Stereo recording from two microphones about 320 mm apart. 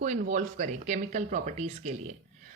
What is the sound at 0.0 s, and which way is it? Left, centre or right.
A woman's voice, right.